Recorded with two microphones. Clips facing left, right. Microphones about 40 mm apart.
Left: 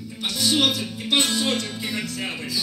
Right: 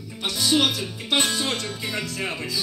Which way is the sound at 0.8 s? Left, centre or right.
Right.